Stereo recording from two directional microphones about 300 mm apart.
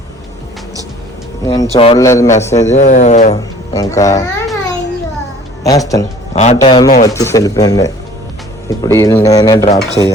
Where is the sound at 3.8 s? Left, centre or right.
Centre.